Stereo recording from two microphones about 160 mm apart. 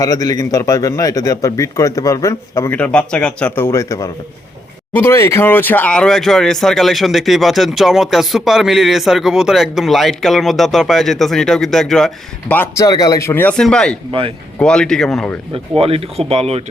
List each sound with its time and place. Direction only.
0.0 s a man's voice: 20° left (ahead or behind); by 13.9 s 5° left (ahead or behind)
14.1 s speech: 35° right (ahead or behind)
14.6 s speech: 5° left (ahead or behind)
15.8 s speech: 40° right (ahead or behind)